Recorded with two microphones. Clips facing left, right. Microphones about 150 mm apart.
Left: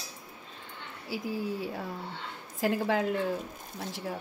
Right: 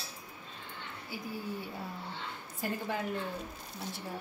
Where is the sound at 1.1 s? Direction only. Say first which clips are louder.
Left 7 dB; 90° left.